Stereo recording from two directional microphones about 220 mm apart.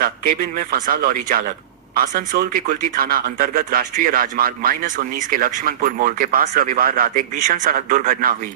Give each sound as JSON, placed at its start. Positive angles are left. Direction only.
{"t": 0.5, "sound": "speech", "side_deg": -40}